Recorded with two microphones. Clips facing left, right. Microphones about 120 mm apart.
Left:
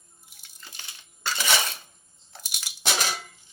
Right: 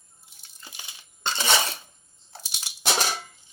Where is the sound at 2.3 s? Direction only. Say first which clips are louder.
Right 1 dB; 30° right (ahead or behind).